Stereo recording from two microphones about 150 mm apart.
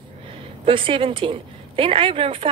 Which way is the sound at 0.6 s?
35° right (ahead or behind).